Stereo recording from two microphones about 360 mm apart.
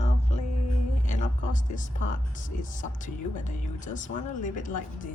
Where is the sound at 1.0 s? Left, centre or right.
Centre.